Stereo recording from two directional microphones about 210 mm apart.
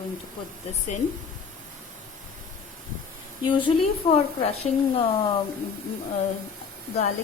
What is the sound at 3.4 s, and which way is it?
A woman's voice, 25° left (ahead or behind).